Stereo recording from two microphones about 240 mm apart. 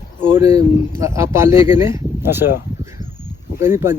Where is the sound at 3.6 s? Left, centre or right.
Centre.